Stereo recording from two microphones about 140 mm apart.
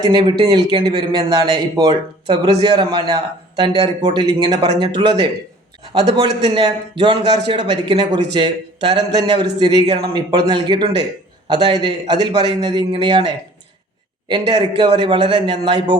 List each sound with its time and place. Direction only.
0.0 s a man's voice: 30° right (ahead or behind)